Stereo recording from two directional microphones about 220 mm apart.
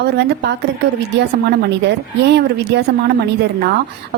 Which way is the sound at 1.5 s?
50° right (ahead or behind).